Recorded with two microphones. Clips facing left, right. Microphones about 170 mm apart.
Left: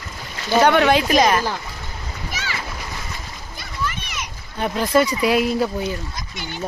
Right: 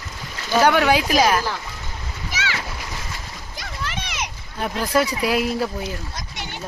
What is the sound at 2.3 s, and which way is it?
Splash, 90° right.